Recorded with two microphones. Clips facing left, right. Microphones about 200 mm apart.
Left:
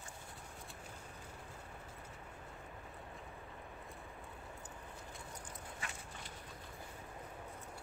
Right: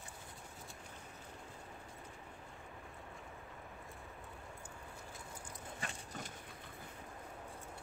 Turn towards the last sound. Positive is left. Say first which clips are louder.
# right 3 dB
turn(degrees=-40)  # may be behind; listen again after turning